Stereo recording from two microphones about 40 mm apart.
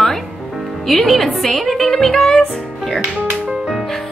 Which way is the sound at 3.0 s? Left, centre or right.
Right.